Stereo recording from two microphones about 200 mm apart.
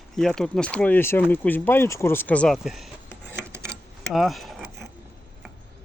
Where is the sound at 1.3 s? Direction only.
10° left (ahead or behind).